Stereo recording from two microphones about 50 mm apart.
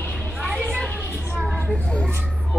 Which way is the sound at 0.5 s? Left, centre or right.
Centre.